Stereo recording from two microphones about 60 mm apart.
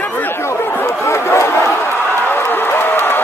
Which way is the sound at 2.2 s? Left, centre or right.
Left.